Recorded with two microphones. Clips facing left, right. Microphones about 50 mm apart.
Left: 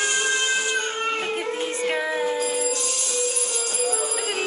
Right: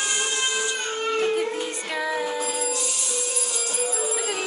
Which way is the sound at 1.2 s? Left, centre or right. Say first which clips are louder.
Right 3 dB; left.